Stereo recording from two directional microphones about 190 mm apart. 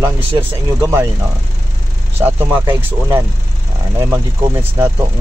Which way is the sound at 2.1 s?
10° right (ahead or behind).